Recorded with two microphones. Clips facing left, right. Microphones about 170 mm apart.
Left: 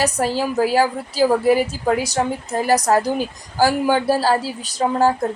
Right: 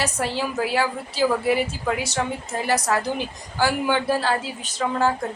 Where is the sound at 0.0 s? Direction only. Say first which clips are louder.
Left 5 dB; 40° left (ahead or behind).